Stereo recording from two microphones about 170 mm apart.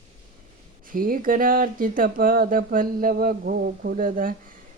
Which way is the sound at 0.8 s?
55° right (ahead or behind).